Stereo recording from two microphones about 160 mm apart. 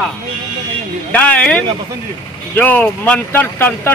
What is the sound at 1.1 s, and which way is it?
Speech, 10° left (ahead or behind).